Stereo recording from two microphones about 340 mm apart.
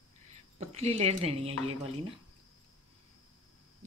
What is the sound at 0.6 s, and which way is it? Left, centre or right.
Speech, centre.